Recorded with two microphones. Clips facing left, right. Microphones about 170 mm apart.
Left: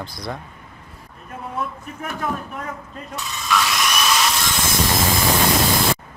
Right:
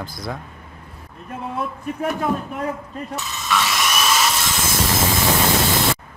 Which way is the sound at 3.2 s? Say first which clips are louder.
Left 1 dB; centre (ahead or behind).